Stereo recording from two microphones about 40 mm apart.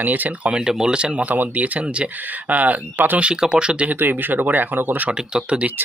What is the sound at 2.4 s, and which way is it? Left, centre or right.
Speech, right.